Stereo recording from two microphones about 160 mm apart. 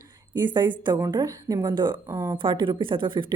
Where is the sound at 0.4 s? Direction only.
30° right (ahead or behind).